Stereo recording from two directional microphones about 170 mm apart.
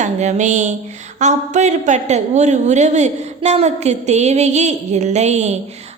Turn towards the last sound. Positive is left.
turn(degrees=-40)  # may be behind; listen again after turning